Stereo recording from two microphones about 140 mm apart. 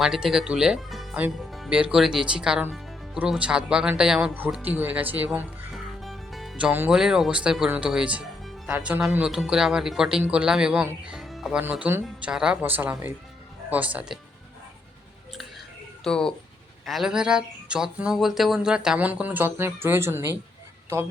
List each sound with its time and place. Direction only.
0.0 s speech: 5° right (ahead or behind)
5.7 s music: centre (ahead or behind)
6.7 s speech: 10° right (ahead or behind)
11.1 s music: centre (ahead or behind)
11.6 s speech: 15° right (ahead or behind)
12.0 s speech: 5° right (ahead or behind)
16.0 s speech: 5° left (ahead or behind); by 20.2 s 15° right (ahead or behind)